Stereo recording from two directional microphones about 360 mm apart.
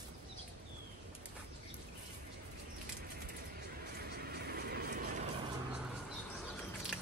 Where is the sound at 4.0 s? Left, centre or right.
Right.